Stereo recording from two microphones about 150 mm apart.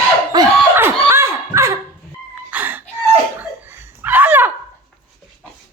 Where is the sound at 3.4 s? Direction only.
15° right (ahead or behind).